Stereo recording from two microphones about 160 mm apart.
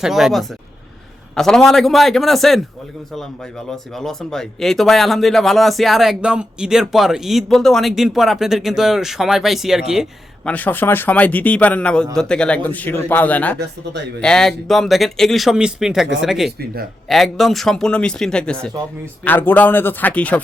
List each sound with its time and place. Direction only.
0.0 s speech: centre (ahead or behind)
3.7 s speech: centre (ahead or behind)
10.5 s speech: 10° left (ahead or behind)
13.6 s speech: 90° right
14.2 s speech: 5° left (ahead or behind)